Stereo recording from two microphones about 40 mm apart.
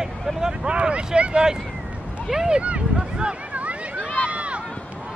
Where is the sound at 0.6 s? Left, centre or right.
Right.